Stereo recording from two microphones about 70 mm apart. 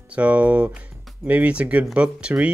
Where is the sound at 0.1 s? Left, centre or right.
Right.